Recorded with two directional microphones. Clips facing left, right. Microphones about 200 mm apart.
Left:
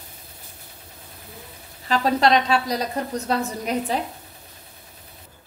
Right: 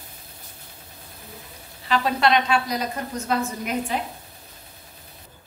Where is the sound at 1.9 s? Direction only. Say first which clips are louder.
Left 2 dB; 40° left (ahead or behind).